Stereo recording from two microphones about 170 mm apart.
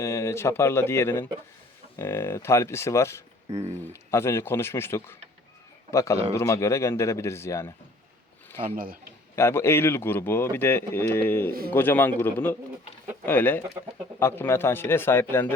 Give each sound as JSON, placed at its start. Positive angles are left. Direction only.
{"t": 0.0, "sound": "a man's voice", "side_deg": 15}
{"t": 8.6, "sound": "a man's voice", "side_deg": -55}
{"t": 9.3, "sound": "a man's voice", "side_deg": 15}